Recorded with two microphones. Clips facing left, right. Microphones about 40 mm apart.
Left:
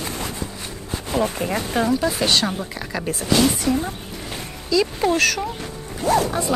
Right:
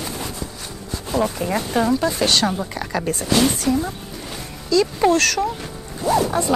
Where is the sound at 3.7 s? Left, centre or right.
Left.